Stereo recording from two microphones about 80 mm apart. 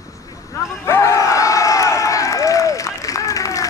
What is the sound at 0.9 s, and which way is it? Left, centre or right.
Crowd, left.